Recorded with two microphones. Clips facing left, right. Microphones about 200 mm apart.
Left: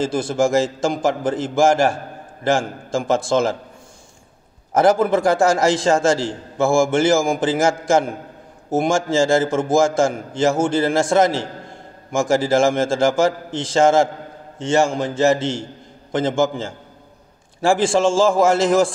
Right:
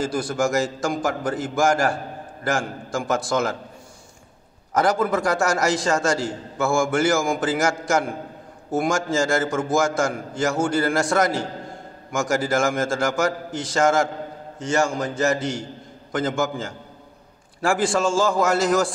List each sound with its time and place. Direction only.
0.0 s a man's voice: 25° left (ahead or behind)
4.7 s a man's voice: 25° left (ahead or behind)